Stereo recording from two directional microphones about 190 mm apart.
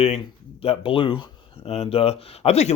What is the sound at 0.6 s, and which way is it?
Speech, 30° left (ahead or behind).